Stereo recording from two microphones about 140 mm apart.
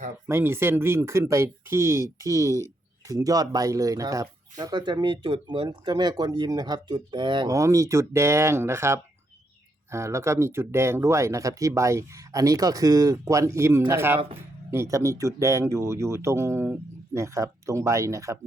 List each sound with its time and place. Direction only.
0.3 s speech: 15° right (ahead or behind); by 7.5 s 35° right (ahead or behind)
7.5 s speech: 20° right (ahead or behind)